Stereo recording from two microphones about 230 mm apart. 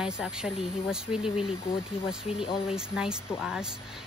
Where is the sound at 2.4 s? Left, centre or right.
Left.